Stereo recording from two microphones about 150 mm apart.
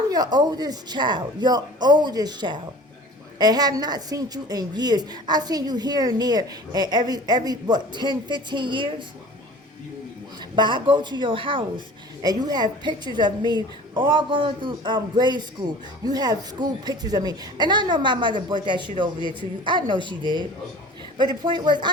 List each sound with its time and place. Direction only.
0.1 s a woman's voice: 25° right (ahead or behind)
10.5 s a woman's voice: 30° right (ahead or behind)